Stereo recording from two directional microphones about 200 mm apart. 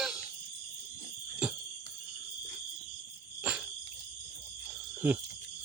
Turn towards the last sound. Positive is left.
turn(degrees=-5)  # may be behind; listen again after turning